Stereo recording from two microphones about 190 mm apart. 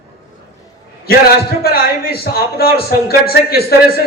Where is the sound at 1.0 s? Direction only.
55° left (ahead or behind).